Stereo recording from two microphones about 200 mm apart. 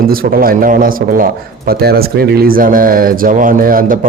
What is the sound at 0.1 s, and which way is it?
A man's voice, 45° right (ahead or behind).